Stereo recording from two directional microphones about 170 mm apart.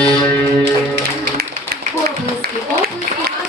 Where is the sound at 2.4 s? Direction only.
70° right (ahead or behind).